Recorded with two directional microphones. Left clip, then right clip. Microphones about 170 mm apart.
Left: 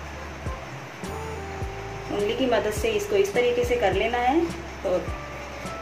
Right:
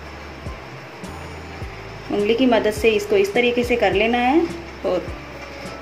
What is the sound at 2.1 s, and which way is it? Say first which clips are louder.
A woman's voice: right 6 dB; 30° right (ahead or behind).